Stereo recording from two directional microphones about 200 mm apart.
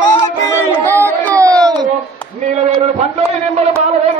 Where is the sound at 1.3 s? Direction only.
15° right (ahead or behind).